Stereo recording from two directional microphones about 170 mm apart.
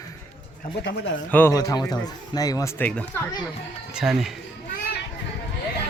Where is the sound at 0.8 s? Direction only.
90° left.